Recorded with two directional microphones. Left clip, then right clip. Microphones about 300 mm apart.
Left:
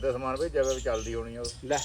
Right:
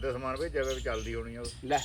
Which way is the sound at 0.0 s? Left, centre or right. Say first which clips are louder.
Left 4 dB; centre.